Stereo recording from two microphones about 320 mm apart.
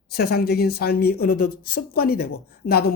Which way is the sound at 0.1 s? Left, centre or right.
Left.